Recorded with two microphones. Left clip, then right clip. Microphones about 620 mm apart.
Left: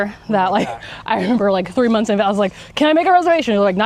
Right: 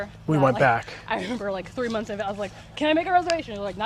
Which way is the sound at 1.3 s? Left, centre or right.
Left.